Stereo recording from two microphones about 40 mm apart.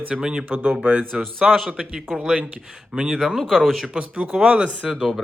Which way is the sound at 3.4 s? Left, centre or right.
Centre.